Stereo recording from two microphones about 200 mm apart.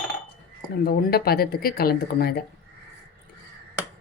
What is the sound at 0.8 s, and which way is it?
Speech, 50° left (ahead or behind).